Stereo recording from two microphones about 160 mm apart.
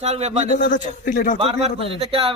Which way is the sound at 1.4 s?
35° right (ahead or behind).